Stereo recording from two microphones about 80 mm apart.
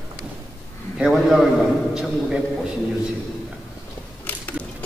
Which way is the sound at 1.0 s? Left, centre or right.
Centre.